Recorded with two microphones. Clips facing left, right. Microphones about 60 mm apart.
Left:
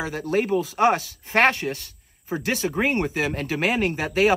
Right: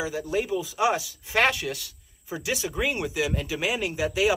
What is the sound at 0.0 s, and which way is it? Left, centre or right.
Speech, left.